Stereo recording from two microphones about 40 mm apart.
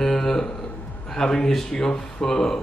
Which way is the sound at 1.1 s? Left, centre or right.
Centre.